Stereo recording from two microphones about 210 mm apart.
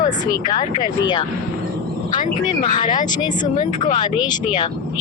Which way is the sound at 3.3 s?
35° left (ahead or behind).